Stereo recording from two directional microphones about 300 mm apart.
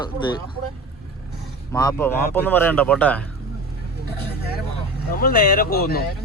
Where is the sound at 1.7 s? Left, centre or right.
Centre.